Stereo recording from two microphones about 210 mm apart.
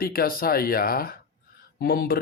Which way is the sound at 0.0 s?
45° left (ahead or behind).